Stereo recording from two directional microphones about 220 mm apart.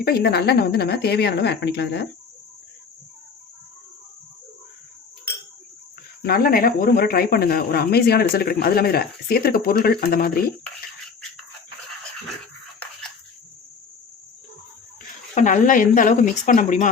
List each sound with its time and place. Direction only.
0.0 s speech: 45° left (ahead or behind)
6.2 s speech: 40° left (ahead or behind)
15.4 s speech: 35° left (ahead or behind)